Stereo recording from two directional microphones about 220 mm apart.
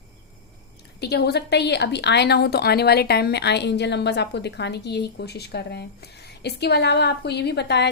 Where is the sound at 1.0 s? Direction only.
50° left (ahead or behind).